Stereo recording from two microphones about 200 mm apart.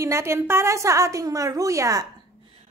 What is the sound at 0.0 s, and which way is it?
A woman's voice, 15° right (ahead or behind).